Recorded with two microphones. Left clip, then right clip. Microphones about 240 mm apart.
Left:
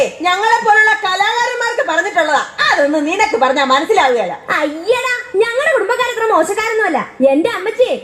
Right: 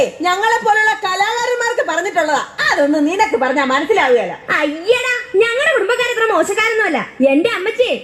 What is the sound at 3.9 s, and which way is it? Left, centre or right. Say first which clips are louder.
Speech: left 1 dB; right.